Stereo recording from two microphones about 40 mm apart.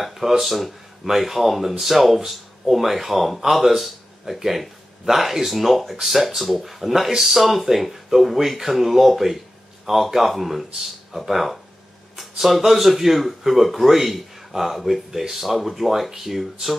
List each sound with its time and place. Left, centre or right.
0.0 s speech: centre